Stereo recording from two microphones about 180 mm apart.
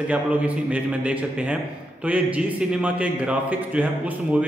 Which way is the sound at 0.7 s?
5° right (ahead or behind).